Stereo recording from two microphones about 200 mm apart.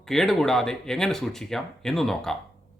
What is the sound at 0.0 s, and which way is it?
Speech, centre (ahead or behind).